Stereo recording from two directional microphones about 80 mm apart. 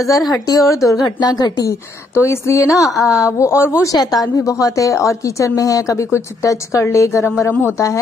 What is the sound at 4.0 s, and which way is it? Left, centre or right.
A woman's voice, left.